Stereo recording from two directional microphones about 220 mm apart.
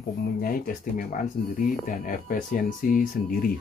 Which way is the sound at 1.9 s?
35° left (ahead or behind).